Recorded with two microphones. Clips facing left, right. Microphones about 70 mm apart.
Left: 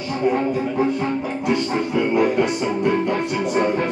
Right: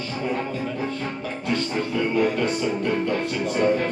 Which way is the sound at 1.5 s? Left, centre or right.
Centre.